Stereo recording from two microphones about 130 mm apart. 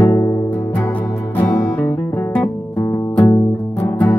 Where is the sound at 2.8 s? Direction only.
20° left (ahead or behind).